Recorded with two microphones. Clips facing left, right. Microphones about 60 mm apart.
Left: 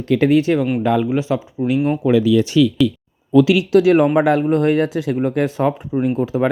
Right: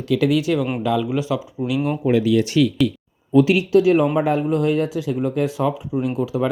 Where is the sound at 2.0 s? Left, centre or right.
Left.